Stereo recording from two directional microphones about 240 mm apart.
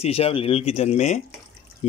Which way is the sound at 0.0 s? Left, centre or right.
Left.